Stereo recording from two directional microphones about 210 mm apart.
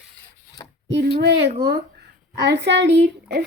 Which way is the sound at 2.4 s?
55° right (ahead or behind).